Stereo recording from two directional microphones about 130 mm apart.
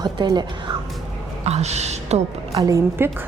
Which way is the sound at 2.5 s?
25° right (ahead or behind).